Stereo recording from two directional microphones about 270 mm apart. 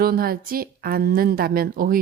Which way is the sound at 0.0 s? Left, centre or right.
Right.